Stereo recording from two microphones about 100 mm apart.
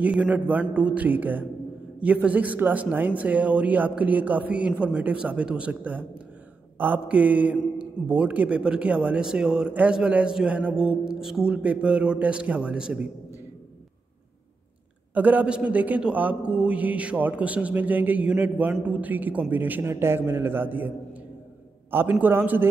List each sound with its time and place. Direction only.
0.0 s speech: 15° right (ahead or behind)
15.1 s a man's voice: 15° right (ahead or behind)